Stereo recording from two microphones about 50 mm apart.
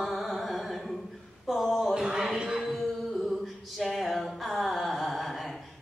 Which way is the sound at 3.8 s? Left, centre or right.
Centre.